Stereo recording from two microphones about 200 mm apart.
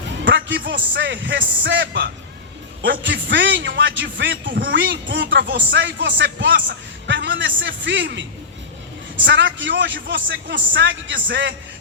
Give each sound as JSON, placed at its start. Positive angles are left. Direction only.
{"t": 0.3, "sound": "a man's voice", "side_deg": -65}